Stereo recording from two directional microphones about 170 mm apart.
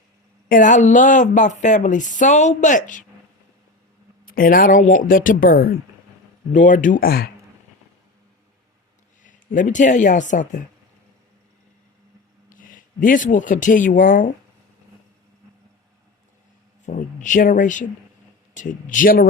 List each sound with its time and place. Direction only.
0.4 s a woman's voice: 50° left (ahead or behind)
4.3 s a woman's voice: 60° left (ahead or behind)
6.5 s a woman's voice: 45° left (ahead or behind)
9.2 s a woman's voice: 50° left (ahead or behind)
12.5 s speech: 50° left (ahead or behind)
16.8 s a woman's voice: 45° left (ahead or behind)